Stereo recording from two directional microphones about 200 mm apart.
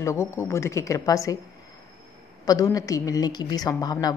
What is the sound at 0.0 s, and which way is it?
A woman's voice, 15° left (ahead or behind).